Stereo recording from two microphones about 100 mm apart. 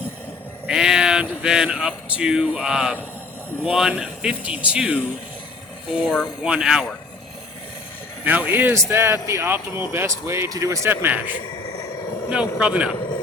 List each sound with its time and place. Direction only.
0.7 s speech: 5° right (ahead or behind)
8.2 s speech: 15° right (ahead or behind); by 10.8 s 35° right (ahead or behind)
10.8 s speech: 20° right (ahead or behind)
12.3 s speech: 10° right (ahead or behind)